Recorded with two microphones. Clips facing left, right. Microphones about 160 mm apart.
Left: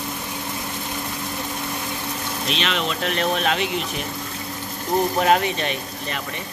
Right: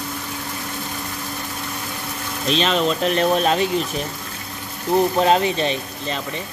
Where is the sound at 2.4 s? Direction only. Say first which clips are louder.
Right 6 dB; 35° right (ahead or behind).